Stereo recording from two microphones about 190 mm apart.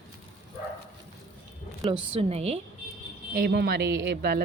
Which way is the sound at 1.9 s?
30° right (ahead or behind).